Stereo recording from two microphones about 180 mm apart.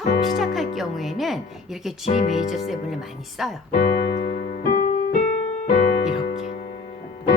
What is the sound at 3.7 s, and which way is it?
Piano, 60° left (ahead or behind).